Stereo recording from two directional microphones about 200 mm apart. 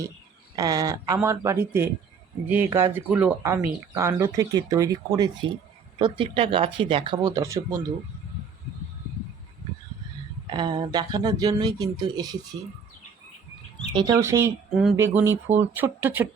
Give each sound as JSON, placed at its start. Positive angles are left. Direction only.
{"t": 0.5, "sound": "speech", "side_deg": -20}
{"t": 10.4, "sound": "speech", "side_deg": -25}
{"t": 13.9, "sound": "speech", "side_deg": -20}